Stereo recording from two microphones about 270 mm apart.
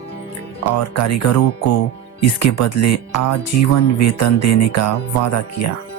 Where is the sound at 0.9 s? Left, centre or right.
Left.